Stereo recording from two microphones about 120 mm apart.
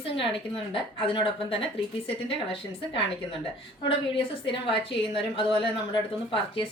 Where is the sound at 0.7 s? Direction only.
45° left (ahead or behind).